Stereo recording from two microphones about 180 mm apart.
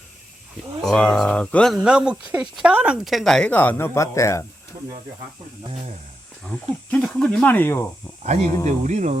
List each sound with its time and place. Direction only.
0.8 s speech: 5° left (ahead or behind)
6.9 s speech: 5° left (ahead or behind)
8.6 s speech: 40° right (ahead or behind)